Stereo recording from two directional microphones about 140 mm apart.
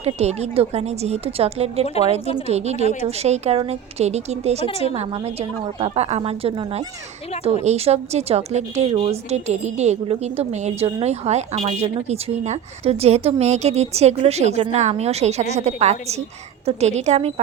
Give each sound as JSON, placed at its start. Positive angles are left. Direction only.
{"t": 0.0, "sound": "a woman's voice", "side_deg": -50}